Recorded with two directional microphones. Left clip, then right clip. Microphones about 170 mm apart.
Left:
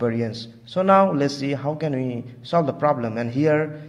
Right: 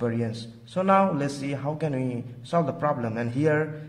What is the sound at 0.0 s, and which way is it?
A man's voice, 20° left (ahead or behind).